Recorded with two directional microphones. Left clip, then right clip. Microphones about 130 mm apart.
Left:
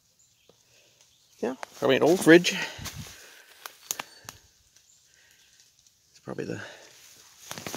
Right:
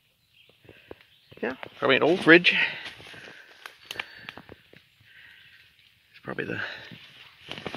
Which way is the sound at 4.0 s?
20° left (ahead or behind).